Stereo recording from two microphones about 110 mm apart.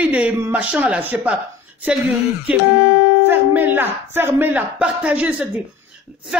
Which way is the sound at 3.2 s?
20° right (ahead or behind).